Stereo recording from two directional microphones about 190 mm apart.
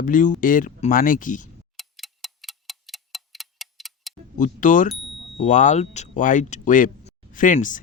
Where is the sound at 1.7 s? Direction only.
Centre (ahead or behind).